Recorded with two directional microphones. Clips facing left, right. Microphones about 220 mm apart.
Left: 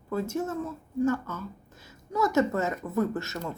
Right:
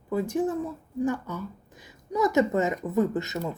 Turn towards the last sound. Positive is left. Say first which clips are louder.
# right 3 dB
turn(degrees=-15)  # may be behind; listen again after turning